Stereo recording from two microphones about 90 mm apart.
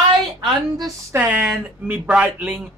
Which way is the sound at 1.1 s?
20° right (ahead or behind).